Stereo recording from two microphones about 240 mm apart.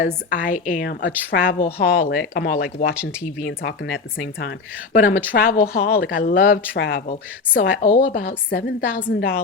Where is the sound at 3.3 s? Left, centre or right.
Left.